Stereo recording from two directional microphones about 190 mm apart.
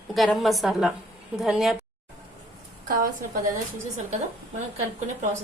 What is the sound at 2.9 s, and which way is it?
Speech, 50° right (ahead or behind).